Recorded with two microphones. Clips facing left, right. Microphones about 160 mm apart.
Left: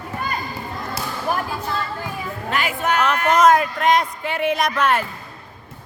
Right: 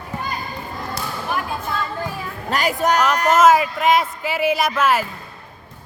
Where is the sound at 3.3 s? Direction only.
5° right (ahead or behind).